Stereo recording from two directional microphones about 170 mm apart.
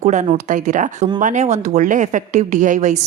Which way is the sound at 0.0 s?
45° right (ahead or behind).